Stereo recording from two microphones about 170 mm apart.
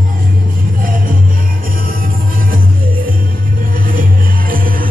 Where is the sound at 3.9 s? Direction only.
55° right (ahead or behind).